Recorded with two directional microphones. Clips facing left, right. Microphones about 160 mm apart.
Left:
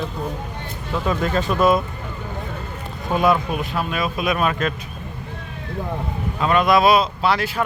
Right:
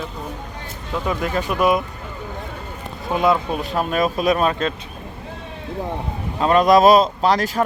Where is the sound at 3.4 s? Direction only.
35° right (ahead or behind).